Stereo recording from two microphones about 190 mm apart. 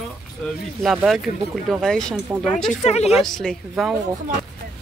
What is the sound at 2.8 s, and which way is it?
Speech, 35° left (ahead or behind).